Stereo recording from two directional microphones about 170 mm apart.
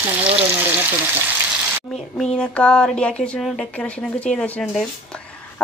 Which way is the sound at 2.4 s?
5° left (ahead or behind).